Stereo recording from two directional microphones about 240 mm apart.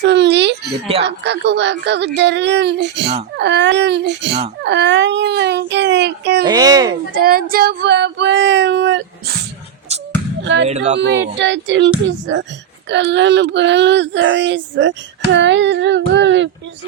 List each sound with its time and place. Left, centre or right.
0.0 s speech: right
6.4 s speech: centre
7.2 s speech: right
10.4 s speech: right
10.7 s speech: right
10.9 s speech: right
15.3 s a sound: right